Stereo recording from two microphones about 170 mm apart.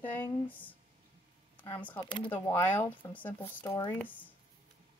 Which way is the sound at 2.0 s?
30° left (ahead or behind).